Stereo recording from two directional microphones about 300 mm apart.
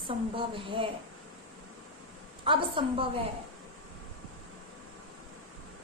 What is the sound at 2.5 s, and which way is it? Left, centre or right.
Speech, centre.